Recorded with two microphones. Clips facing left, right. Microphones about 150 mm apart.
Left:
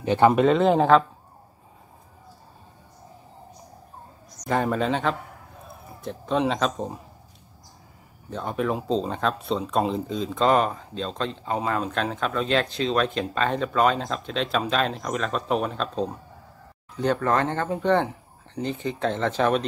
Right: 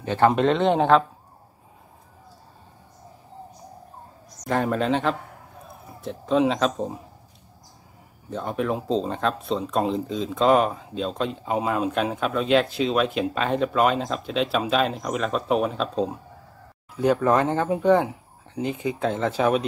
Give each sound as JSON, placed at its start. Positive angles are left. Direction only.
{"t": 0.0, "sound": "speech", "side_deg": 20}
{"t": 0.3, "sound": "speech", "side_deg": 0}
{"t": 4.5, "sound": "speech", "side_deg": 0}
{"t": 8.3, "sound": "speech", "side_deg": 0}